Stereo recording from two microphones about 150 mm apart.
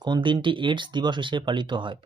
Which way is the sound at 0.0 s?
30° right (ahead or behind).